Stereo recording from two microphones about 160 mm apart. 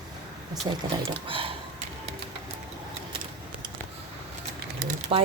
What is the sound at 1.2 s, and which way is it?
Speech, 35° right (ahead or behind).